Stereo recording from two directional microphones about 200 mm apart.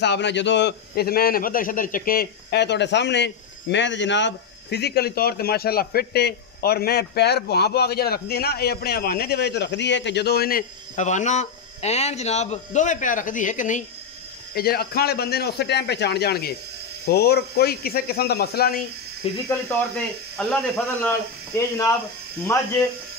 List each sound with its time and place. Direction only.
0.0 s a man's voice: 60° left (ahead or behind); by 13.8 s 40° left (ahead or behind)
14.5 s speech: 50° left (ahead or behind)
19.2 s speech: 30° left (ahead or behind)
20.3 s speech: 5° left (ahead or behind)
21.5 s speech: 15° left (ahead or behind)